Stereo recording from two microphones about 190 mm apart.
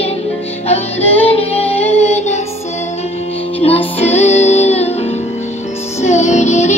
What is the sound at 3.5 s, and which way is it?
Music, 30° left (ahead or behind).